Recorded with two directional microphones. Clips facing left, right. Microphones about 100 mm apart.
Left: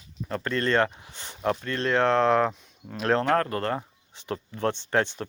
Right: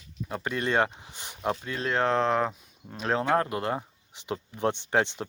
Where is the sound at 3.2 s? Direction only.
15° right (ahead or behind).